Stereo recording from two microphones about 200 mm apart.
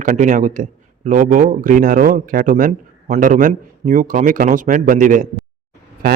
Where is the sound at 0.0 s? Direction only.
40° right (ahead or behind).